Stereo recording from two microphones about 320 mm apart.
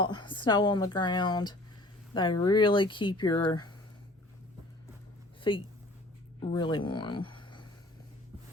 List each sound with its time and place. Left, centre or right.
0.0 s a woman's voice: centre
5.4 s speech: centre